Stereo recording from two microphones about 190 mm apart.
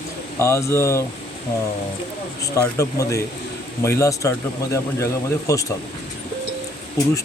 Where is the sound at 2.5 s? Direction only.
15° left (ahead or behind).